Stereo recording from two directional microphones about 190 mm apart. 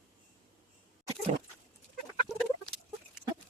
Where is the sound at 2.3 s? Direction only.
35° left (ahead or behind).